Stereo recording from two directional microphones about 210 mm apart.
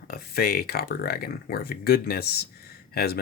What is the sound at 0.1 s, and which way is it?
Speech, 45° left (ahead or behind).